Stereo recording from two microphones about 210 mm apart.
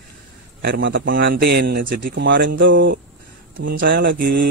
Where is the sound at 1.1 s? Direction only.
45° right (ahead or behind).